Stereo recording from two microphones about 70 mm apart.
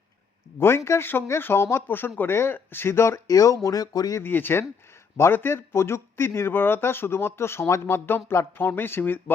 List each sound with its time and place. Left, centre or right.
0.9 s speech: left
3.2 s speech: left
4.2 s speech: left